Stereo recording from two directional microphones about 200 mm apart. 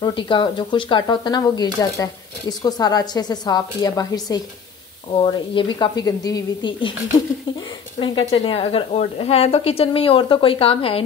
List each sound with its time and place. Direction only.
0.0 s a woman's voice: 25° left (ahead or behind)
8.0 s a woman's voice: 25° left (ahead or behind)